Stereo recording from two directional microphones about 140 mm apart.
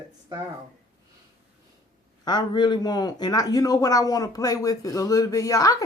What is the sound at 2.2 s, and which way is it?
A man's voice, 30° left (ahead or behind).